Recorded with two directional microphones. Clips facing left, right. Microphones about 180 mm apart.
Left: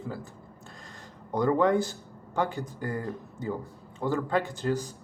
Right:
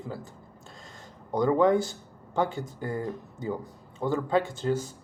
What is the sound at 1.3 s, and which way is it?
Speech, 20° right (ahead or behind).